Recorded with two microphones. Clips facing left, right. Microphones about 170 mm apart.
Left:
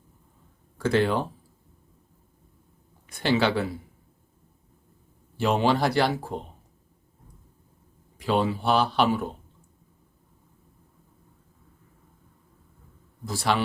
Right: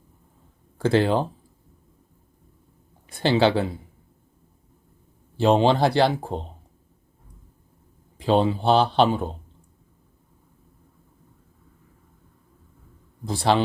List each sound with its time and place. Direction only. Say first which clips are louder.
0.8 s speech: right 3 dB; 30° right (ahead or behind)
3.2 s speech: right 4 dB; 30° right (ahead or behind)
5.4 s speech: right 5 dB; 30° right (ahead or behind)
8.2 s speech: right 4 dB; 25° right (ahead or behind)
13.2 s speech: right 5 dB; 30° right (ahead or behind)